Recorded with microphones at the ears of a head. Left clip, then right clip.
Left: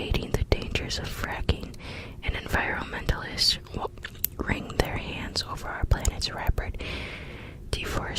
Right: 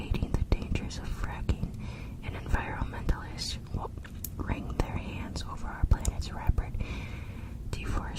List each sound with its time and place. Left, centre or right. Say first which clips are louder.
0.0 s whispering: left 8 dB; left
4.4 s speech: left 8 dB; left
7.7 s whispering: left 8 dB; left